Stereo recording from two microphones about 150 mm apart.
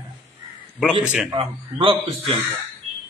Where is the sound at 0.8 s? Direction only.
5° right (ahead or behind).